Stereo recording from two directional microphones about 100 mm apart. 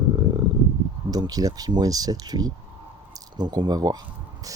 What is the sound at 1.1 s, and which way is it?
Speech, 40° right (ahead or behind).